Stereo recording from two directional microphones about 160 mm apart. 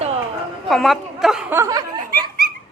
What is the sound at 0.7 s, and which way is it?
Speech, centre (ahead or behind).